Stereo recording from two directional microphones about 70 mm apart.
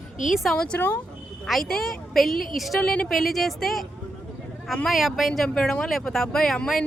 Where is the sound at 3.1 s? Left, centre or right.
Centre.